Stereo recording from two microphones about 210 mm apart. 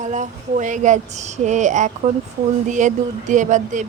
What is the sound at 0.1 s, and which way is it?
Speech, 35° right (ahead or behind).